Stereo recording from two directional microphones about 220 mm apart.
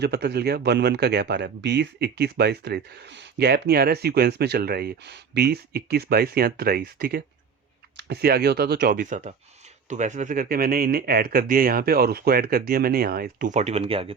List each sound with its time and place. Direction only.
0.0 s speech: 50° right (ahead or behind); by 14.1 s 25° right (ahead or behind)